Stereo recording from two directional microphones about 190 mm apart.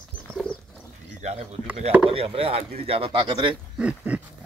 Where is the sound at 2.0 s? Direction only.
30° right (ahead or behind).